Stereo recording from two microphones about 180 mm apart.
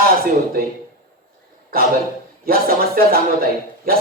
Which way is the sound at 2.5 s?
55° right (ahead or behind).